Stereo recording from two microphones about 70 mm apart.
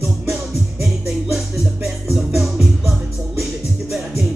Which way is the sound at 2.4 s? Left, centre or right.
Centre.